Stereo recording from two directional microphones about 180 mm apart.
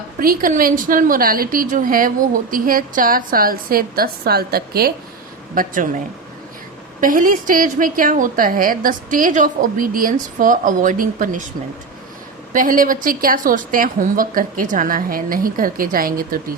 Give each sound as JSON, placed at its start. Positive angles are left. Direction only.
{"t": 0.2, "sound": "a woman's voice", "side_deg": -50}
{"t": 7.0, "sound": "a woman's voice", "side_deg": -50}
{"t": 12.5, "sound": "a woman's voice", "side_deg": -50}